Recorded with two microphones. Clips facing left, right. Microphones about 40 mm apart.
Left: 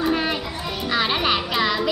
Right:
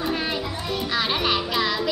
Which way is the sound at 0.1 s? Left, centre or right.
Centre.